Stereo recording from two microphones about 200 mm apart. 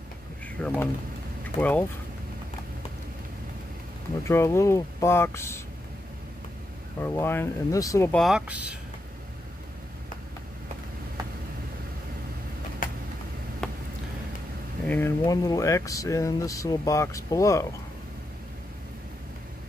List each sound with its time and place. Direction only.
0.6 s speech: 5° left (ahead or behind)
4.2 s speech: 15° left (ahead or behind)
7.0 s speech: 10° left (ahead or behind)
8.1 s speech: centre (ahead or behind)
12.8 s vehicle: 45° left (ahead or behind)
13.6 s a sound: 5° left (ahead or behind)
14.9 s speech: 10° left (ahead or behind)